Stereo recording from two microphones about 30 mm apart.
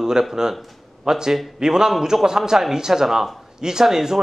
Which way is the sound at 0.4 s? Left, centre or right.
Right.